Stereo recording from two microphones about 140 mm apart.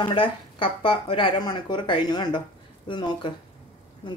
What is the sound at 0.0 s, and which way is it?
Speech, 35° left (ahead or behind).